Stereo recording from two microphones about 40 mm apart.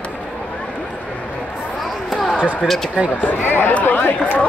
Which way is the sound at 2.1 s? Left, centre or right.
Centre.